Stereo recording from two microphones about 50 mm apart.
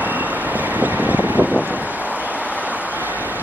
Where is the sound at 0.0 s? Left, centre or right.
Right.